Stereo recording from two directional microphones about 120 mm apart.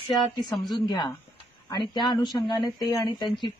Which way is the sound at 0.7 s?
35° left (ahead or behind).